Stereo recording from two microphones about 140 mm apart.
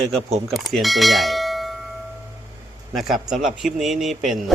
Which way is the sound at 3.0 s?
Centre (ahead or behind).